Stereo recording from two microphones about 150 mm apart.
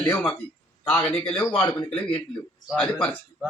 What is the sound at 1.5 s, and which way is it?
Speech, 30° left (ahead or behind).